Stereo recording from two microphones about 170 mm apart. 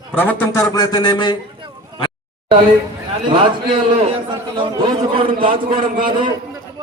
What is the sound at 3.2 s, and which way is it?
Speech, 30° right (ahead or behind).